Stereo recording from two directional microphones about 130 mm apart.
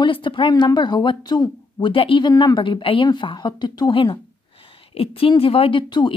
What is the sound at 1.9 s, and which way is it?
Speech, 45° left (ahead or behind).